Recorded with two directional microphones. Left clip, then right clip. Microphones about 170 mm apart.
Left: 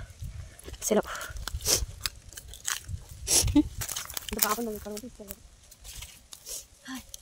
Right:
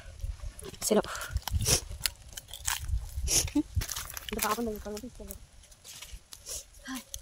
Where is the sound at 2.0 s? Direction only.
10° right (ahead or behind).